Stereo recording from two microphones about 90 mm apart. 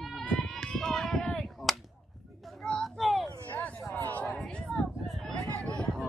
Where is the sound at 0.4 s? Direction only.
5° left (ahead or behind).